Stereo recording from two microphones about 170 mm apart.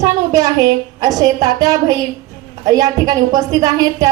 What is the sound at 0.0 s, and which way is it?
A woman's voice, 20° right (ahead or behind).